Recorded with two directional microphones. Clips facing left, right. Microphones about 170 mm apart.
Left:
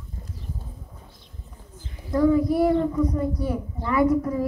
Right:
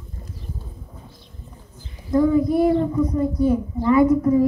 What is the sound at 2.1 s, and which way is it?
A child's voice, 20° right (ahead or behind).